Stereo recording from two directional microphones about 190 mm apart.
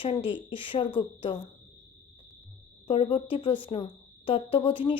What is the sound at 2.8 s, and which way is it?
A woman's voice, 30° left (ahead or behind).